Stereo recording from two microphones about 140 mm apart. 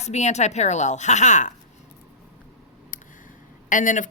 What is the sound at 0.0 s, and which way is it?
Speech, 55° left (ahead or behind).